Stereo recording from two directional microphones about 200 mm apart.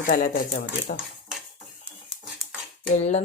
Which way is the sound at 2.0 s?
Centre (ahead or behind).